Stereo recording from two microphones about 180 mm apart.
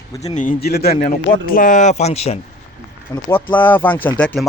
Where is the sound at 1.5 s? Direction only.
45° left (ahead or behind).